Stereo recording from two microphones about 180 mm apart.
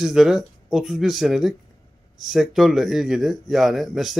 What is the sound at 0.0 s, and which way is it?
Speech, centre (ahead or behind).